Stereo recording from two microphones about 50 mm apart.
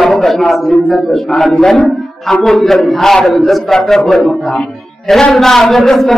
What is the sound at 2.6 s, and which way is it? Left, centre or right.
A man's voice, centre.